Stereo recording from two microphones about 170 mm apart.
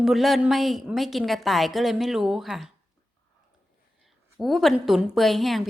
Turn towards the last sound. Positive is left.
turn(degrees=0)  # may be behind; listen again after turning